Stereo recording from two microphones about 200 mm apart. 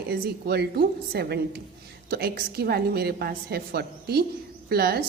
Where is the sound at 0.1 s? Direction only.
55° right (ahead or behind).